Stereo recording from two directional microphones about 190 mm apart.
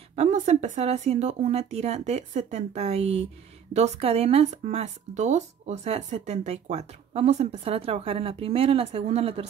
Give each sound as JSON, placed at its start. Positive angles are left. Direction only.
{"t": 0.1, "sound": "speech", "side_deg": -35}